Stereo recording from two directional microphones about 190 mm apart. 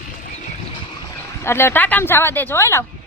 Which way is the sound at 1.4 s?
15° left (ahead or behind).